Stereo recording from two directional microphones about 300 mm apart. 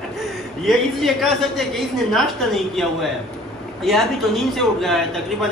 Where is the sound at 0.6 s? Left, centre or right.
Centre.